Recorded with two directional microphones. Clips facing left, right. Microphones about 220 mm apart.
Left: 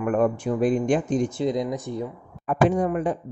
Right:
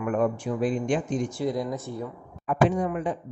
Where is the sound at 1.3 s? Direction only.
20° left (ahead or behind).